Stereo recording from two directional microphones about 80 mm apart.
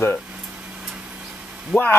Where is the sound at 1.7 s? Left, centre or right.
Centre.